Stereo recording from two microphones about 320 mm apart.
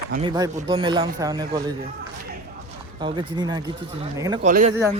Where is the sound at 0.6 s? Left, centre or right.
Centre.